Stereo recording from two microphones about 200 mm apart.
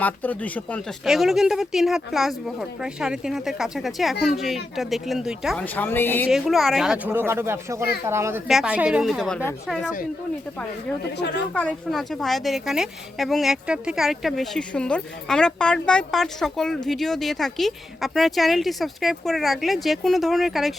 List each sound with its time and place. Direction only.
0.0 s a woman's voice: 10° left (ahead or behind)
6.2 s a woman's voice: centre (ahead or behind)
11.2 s a woman's voice: 60° left (ahead or behind)
11.5 s a woman's voice: 5° left (ahead or behind)